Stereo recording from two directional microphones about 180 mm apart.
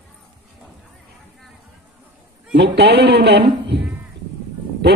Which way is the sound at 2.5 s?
70° right (ahead or behind).